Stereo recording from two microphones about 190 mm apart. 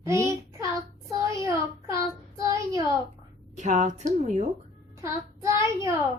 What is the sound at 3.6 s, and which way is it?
Speech, 40° right (ahead or behind).